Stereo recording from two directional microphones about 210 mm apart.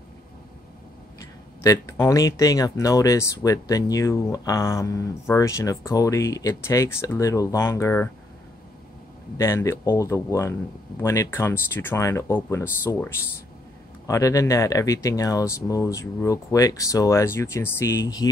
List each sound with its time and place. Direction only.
1.6 s speech: 15° left (ahead or behind)
9.4 s speech: 15° left (ahead or behind)